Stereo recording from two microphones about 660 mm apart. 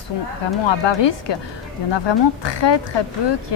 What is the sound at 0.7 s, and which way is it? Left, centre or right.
A woman's voice, left.